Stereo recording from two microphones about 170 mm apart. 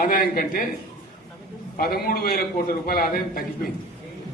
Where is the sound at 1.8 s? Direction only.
60° left (ahead or behind).